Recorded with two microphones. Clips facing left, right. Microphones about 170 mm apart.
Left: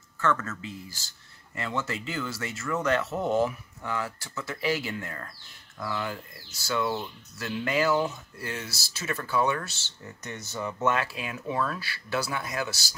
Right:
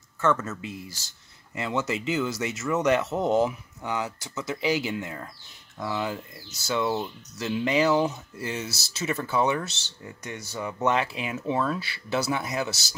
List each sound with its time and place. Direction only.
0.2 s speech: 20° right (ahead or behind)